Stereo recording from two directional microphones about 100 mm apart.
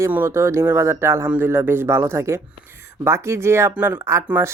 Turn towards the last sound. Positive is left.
turn(degrees=-15)  # may be behind; listen again after turning